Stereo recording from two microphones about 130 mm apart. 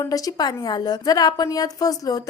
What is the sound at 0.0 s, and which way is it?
A woman's voice, 25° left (ahead or behind).